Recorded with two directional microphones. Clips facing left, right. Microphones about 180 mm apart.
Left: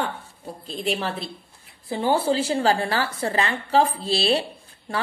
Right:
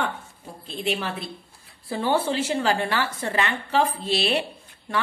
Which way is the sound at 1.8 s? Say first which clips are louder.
Left 2 dB; 25° left (ahead or behind).